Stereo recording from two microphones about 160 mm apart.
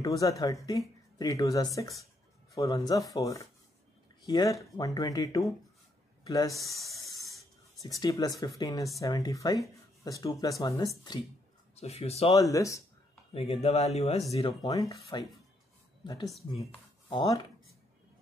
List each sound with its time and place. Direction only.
0.0 s speech: 20° left (ahead or behind)
7.8 s speech: 20° left (ahead or behind)
11.7 s speech: 40° left (ahead or behind)
12.4 s speech: 20° left (ahead or behind)
13.3 s speech: 40° left (ahead or behind)
14.3 s speech: 30° left (ahead or behind)
14.7 s speech: 20° left (ahead or behind)
16.0 s speech: 25° left (ahead or behind)